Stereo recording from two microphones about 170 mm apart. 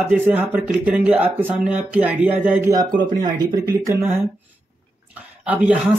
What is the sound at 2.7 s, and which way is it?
Speech, 25° right (ahead or behind).